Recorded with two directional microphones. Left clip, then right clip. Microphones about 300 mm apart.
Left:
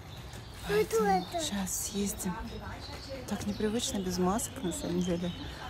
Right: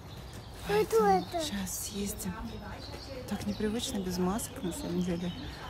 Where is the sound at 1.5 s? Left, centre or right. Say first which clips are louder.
Left 2 dB; centre.